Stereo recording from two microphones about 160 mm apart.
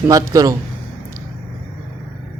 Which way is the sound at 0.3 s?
20° right (ahead or behind).